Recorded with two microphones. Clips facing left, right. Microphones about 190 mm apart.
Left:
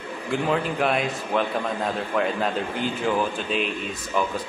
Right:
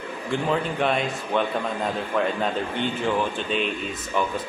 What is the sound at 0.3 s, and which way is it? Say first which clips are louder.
Speech: left 1 dB; 5° left (ahead or behind).